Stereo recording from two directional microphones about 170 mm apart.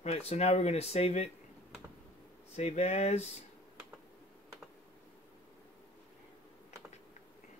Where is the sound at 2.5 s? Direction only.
40° left (ahead or behind).